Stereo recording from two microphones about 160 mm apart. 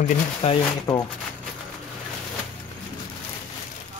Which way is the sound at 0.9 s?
5° left (ahead or behind).